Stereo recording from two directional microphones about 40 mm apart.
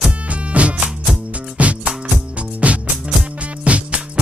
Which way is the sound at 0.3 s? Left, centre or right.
Right.